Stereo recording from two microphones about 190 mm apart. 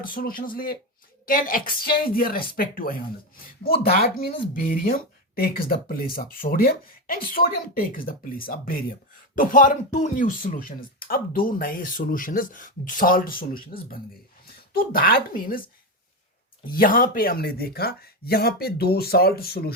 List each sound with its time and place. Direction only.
0.0 s speech: 50° left (ahead or behind)